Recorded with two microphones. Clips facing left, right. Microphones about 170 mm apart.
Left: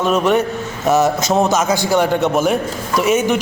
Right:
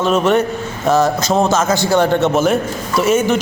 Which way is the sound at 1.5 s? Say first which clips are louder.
Right 1 dB; 15° left (ahead or behind).